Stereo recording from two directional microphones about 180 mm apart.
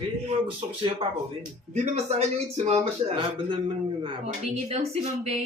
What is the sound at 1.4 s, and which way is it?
Speech, 40° right (ahead or behind).